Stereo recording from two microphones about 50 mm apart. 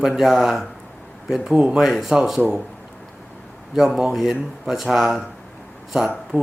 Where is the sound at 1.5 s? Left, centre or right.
Centre.